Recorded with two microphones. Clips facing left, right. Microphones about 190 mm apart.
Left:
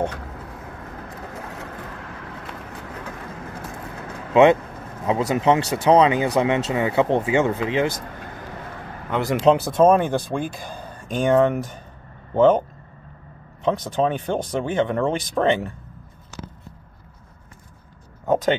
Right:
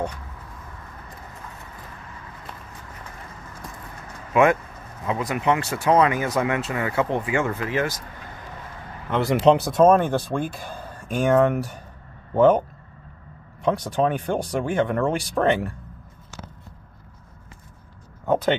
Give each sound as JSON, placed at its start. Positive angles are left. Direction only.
{"t": 0.1, "sound": "vehicle", "side_deg": 70}
{"t": 4.3, "sound": "speech", "side_deg": 25}
{"t": 9.1, "sound": "speech", "side_deg": 0}
{"t": 11.1, "sound": "speech", "side_deg": -10}
{"t": 13.7, "sound": "speech", "side_deg": -10}